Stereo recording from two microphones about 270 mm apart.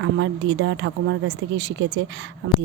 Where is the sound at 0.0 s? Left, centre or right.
Right.